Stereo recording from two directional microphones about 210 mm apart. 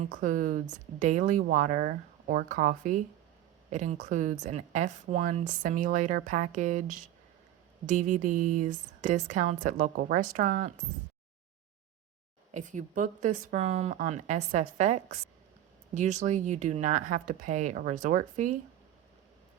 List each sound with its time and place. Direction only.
0.0 s speech: 40° right (ahead or behind)
12.5 s speech: 35° right (ahead or behind)